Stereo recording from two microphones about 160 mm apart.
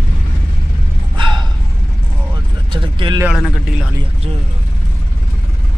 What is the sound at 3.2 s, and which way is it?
Speech, 5° right (ahead or behind).